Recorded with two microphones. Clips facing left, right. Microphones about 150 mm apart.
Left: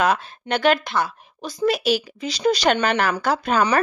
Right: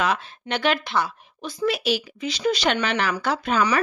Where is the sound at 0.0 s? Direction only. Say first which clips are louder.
Left 4 dB; 45° left (ahead or behind).